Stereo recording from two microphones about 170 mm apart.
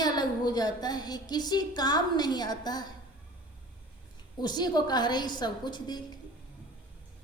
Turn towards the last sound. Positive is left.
turn(degrees=25)  # may be behind; listen again after turning